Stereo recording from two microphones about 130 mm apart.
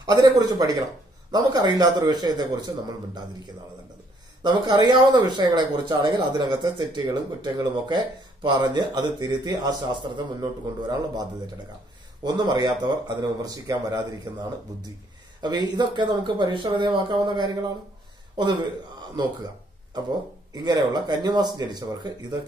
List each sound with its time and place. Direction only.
0.0 s speech: 30° right (ahead or behind)
4.4 s speech: 35° right (ahead or behind)
15.4 s a man's voice: 35° right (ahead or behind)
20.5 s speech: 35° right (ahead or behind)